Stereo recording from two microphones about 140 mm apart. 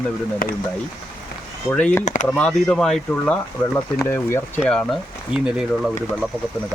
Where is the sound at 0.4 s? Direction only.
90° left.